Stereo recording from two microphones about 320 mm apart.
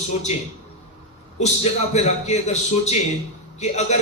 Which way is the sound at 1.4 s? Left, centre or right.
Left.